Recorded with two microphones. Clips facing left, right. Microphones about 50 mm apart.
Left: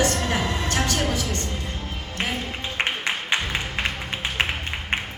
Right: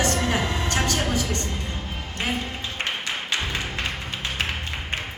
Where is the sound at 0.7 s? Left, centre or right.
Right.